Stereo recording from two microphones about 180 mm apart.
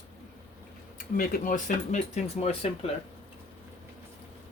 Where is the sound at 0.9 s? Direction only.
50° left (ahead or behind); by 2.9 s 35° left (ahead or behind).